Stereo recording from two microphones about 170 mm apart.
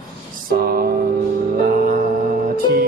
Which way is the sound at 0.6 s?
60° right (ahead or behind).